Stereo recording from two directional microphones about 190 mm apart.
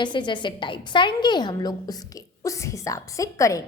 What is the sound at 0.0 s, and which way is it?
A woman's voice, 25° left (ahead or behind).